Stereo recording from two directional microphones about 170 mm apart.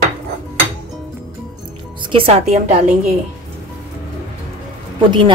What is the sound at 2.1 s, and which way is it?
Speech, 35° right (ahead or behind).